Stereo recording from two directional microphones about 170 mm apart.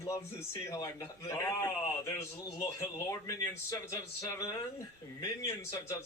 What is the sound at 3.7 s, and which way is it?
Speech, 20° left (ahead or behind).